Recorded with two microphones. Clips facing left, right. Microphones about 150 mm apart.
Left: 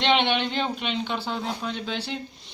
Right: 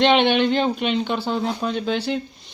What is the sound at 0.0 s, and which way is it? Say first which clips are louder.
Speech: right 6 dB; 50° right (ahead or behind).